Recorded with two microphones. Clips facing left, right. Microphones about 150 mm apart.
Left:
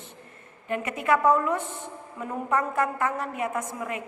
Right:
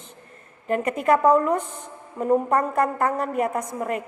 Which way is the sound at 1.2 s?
35° right (ahead or behind).